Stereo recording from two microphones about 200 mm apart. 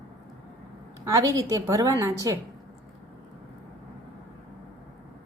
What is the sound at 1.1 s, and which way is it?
A woman's voice, 15° right (ahead or behind).